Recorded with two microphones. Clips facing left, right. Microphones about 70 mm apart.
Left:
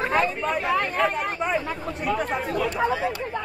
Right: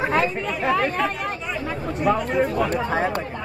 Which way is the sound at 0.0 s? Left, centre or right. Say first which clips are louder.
Right 2 dB; centre.